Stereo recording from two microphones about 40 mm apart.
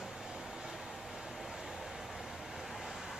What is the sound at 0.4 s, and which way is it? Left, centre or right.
Vehicle, centre.